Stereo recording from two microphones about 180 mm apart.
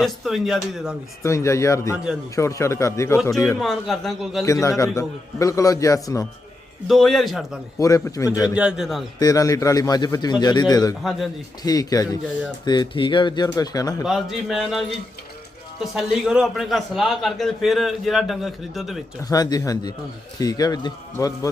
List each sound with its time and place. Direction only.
0.0 s a man's voice: centre (ahead or behind)
1.2 s a man's voice: 15° left (ahead or behind)
3.6 s a man's voice: centre (ahead or behind)
4.4 s a man's voice: 15° left (ahead or behind)
6.8 s a man's voice: centre (ahead or behind)
7.8 s a man's voice: 20° left (ahead or behind)
8.5 s a man's voice: 5° right (ahead or behind)
9.1 s speech: 20° left (ahead or behind)
14.0 s a man's voice: centre (ahead or behind)
19.3 s speech: 20° left (ahead or behind)